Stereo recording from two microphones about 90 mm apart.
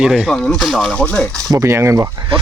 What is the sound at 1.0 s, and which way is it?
Speech, 15° left (ahead or behind).